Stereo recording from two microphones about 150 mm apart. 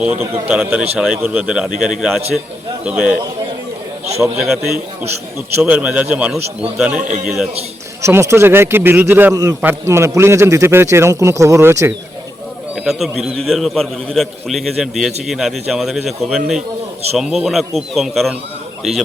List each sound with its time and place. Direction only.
0.0 s a man's voice: 10° right (ahead or behind)
4.2 s a man's voice: centre (ahead or behind)
8.0 s a man's voice: 20° right (ahead or behind)
12.7 s a man's voice: 5° right (ahead or behind)